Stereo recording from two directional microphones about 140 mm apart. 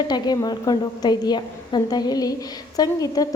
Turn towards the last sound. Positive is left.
turn(degrees=25)  # may be behind; listen again after turning